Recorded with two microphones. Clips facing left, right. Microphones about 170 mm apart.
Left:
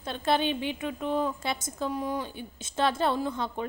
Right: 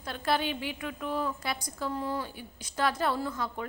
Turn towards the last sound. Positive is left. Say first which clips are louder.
# left 3 dB
turn(degrees=25)  # may be behind; listen again after turning